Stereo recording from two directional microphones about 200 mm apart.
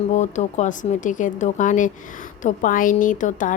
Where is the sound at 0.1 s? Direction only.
35° left (ahead or behind).